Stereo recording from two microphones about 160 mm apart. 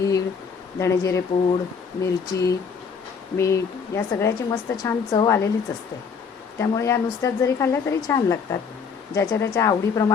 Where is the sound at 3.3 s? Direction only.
20° left (ahead or behind).